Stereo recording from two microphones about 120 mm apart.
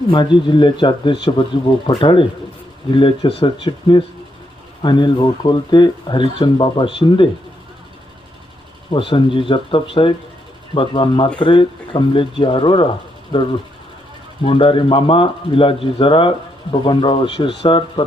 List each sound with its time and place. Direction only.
0.1 s speech: 40° left (ahead or behind)
8.9 s speech: 45° left (ahead or behind)